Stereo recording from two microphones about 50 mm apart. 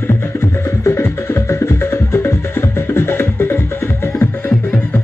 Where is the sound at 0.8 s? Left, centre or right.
Left.